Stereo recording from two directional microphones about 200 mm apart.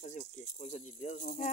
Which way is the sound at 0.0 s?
40° left (ahead or behind).